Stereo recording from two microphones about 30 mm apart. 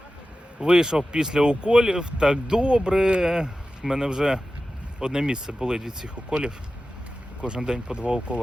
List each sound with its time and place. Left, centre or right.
0.6 s speech: right
7.4 s speech: right